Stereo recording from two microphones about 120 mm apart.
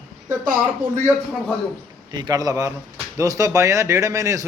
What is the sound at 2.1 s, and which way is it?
Speech, 30° right (ahead or behind).